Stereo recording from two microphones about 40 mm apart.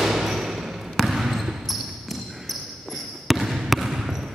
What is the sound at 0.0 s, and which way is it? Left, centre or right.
Basketball bounce, centre.